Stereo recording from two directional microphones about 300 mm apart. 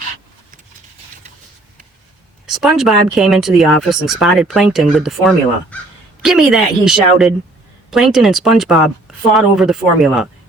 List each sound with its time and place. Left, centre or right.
2.5 s speech: centre